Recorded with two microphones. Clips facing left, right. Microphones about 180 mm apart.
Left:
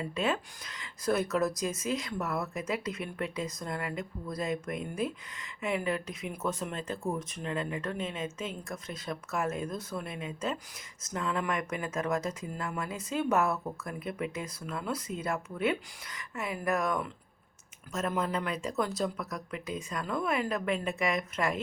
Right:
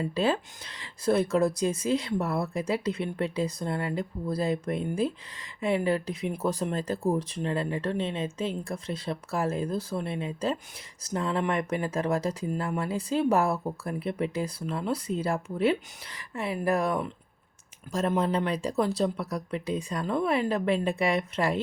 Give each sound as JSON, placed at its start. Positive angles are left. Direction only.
{"t": 0.0, "sound": "speech", "side_deg": -30}